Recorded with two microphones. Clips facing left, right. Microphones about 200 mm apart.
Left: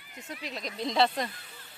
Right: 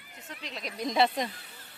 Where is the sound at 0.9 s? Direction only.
20° right (ahead or behind).